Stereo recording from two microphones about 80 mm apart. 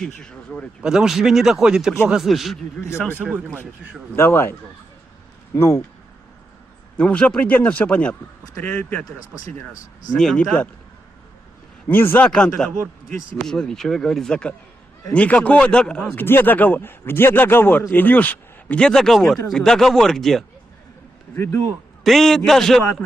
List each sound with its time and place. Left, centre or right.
0.2 s speech: centre
0.8 s speech: centre
4.1 s a man's voice: left
5.5 s a man's voice: left
7.0 s speech: centre
11.9 s a man's voice: left
12.3 s speech: centre
16.1 s a man's voice: left; by 20.4 s centre
21.3 s a man's voice: left
22.0 s speech: centre